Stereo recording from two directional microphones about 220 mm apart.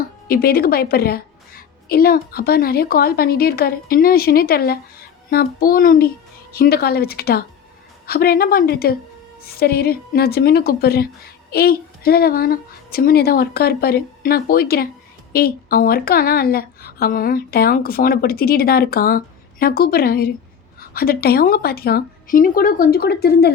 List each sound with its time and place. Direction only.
0.3 s speech: 45° left (ahead or behind)